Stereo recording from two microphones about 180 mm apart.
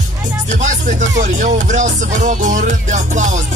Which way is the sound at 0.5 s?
45° right (ahead or behind).